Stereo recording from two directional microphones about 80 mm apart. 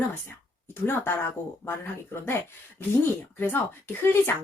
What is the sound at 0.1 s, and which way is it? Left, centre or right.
A woman's voice, left.